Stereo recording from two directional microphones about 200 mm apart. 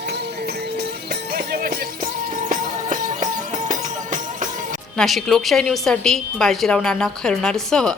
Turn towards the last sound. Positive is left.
turn(degrees=5)  # may be behind; listen again after turning